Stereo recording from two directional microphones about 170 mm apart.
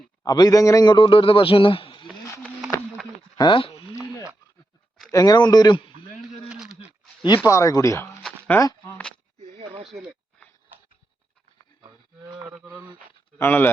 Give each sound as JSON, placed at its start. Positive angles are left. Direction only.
{"t": 0.2, "sound": "a man's voice", "side_deg": 25}
{"t": 3.3, "sound": "speech", "side_deg": 25}
{"t": 5.1, "sound": "a man's voice", "side_deg": 25}
{"t": 7.3, "sound": "speech", "side_deg": 20}
{"t": 8.4, "sound": "a sound", "side_deg": 15}
{"t": 9.4, "sound": "a sound", "side_deg": -35}
{"t": 13.4, "sound": "speech", "side_deg": 10}